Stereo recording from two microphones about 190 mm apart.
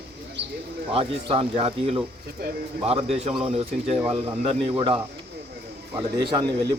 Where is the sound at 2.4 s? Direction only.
55° right (ahead or behind).